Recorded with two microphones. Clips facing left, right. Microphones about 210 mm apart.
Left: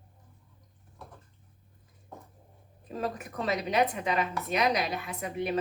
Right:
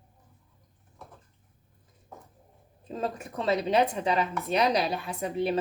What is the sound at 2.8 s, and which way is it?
A woman's voice, 25° right (ahead or behind).